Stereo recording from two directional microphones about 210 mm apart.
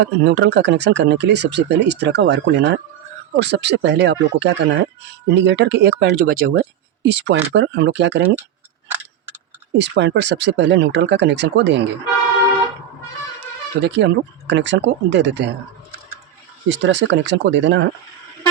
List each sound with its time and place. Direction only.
0.0 s speech: 55° right (ahead or behind)
9.7 s speech: 55° right (ahead or behind)
13.8 s speech: 55° right (ahead or behind)
16.6 s speech: 60° right (ahead or behind)